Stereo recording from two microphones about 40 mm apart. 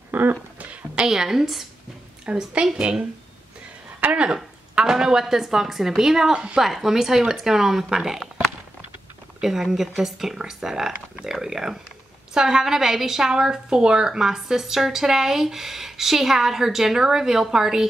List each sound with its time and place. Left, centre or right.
0.1 s a sound: right
1.0 s a woman's voice: centre
2.2 s a woman's voice: right
4.1 s a woman's voice: right
4.7 s a sound: centre
5.2 s a woman's voice: centre
6.3 s a woman's voice: right
6.6 s a woman's voice: centre
9.4 s a woman's voice: centre